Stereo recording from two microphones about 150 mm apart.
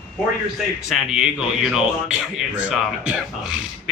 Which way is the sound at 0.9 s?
5° right (ahead or behind).